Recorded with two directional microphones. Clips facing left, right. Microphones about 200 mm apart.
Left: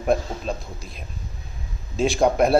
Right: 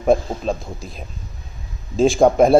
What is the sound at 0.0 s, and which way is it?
Speech, 40° right (ahead or behind).